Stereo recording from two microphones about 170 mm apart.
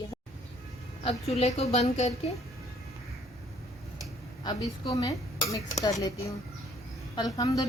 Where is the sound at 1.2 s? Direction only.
40° left (ahead or behind).